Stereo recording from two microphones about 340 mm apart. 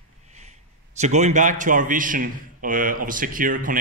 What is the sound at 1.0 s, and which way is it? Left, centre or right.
A man's voice, right.